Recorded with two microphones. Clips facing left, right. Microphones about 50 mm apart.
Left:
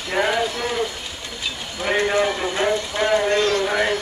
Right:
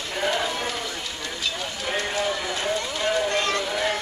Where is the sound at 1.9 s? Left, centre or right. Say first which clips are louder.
Left 7 dB; left.